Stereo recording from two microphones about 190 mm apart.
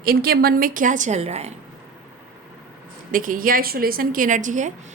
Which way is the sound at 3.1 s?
45° right (ahead or behind).